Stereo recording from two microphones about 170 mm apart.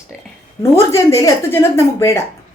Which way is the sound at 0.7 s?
15° left (ahead or behind).